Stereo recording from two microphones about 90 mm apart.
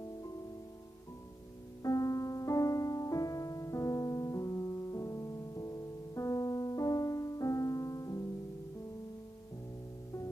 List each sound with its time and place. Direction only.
1.8 s music: 40° left (ahead or behind)